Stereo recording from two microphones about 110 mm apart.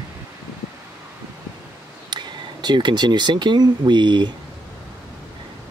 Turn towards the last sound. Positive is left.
turn(degrees=-45)  # may be behind; listen again after turning